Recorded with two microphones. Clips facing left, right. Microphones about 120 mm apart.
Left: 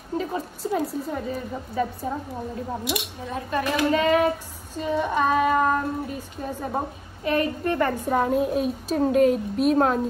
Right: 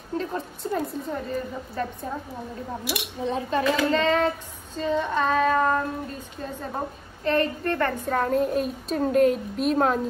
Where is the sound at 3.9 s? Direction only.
10° left (ahead or behind).